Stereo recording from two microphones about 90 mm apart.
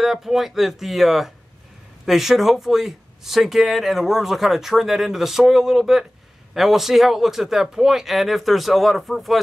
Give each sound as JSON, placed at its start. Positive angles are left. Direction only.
{"t": 0.0, "sound": "speech", "side_deg": -5}